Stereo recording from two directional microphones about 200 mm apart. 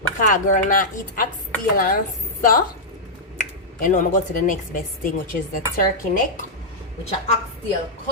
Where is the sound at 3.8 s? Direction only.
40° left (ahead or behind).